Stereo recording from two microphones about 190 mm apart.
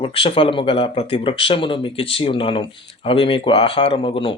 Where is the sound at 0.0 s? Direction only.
30° left (ahead or behind).